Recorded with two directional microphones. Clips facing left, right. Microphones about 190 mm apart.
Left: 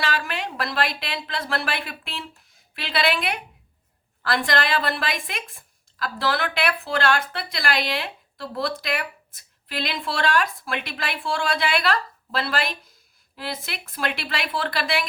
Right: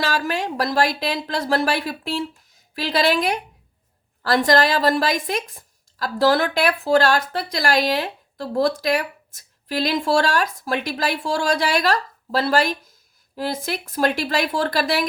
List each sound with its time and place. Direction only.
0.0 s speech: 40° right (ahead or behind)